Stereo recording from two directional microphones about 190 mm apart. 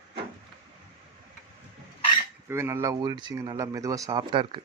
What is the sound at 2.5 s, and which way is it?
Speech, 15° right (ahead or behind).